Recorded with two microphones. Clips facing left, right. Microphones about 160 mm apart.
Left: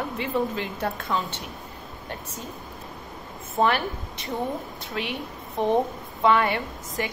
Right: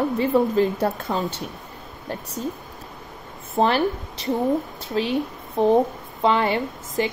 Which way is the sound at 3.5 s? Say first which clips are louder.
Right 4 dB; 30° right (ahead or behind).